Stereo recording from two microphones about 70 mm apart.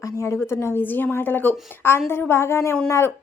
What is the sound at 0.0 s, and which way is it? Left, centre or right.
A woman's voice, left.